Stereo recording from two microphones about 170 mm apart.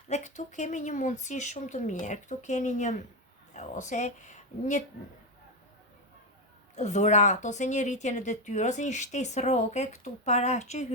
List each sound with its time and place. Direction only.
0.1 s a woman's voice: 45° left (ahead or behind)
6.7 s a woman's voice: 40° left (ahead or behind)